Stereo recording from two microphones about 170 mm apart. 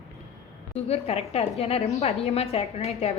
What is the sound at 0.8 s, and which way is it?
A woman's voice, 35° left (ahead or behind).